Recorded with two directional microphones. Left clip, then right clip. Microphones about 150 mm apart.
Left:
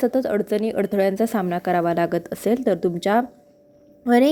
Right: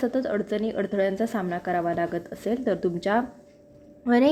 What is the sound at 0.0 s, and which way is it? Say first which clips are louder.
A woman's voice: left 5 dB; 30° left (ahead or behind).